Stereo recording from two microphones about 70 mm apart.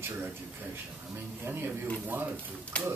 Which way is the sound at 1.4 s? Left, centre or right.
Right.